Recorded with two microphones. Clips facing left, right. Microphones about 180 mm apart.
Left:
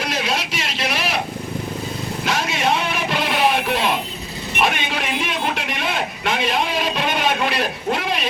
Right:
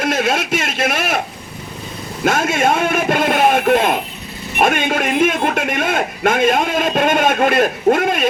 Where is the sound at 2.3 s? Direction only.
50° right (ahead or behind).